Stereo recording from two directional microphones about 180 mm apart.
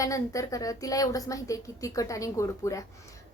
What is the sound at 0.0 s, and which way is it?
Speech, 20° left (ahead or behind).